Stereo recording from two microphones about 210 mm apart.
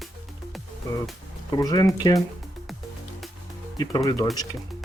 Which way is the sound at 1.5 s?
20° left (ahead or behind).